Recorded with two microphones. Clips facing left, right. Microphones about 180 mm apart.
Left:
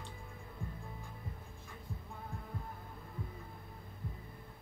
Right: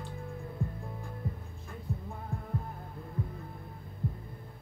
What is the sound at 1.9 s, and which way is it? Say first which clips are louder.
Heart sounds: right 10 dB; 75° right (ahead or behind).